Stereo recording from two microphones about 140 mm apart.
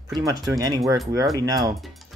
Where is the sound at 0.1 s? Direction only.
25° right (ahead or behind).